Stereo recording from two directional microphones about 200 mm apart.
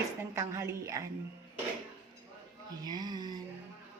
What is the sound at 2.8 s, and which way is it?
Speech, 20° right (ahead or behind).